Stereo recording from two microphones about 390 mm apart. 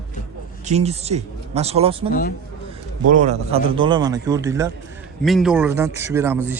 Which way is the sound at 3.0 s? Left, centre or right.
Centre.